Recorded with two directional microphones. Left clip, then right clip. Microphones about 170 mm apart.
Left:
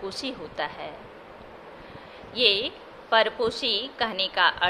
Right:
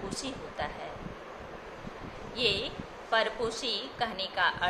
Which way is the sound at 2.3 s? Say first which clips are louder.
Left 7 dB; 55° left (ahead or behind).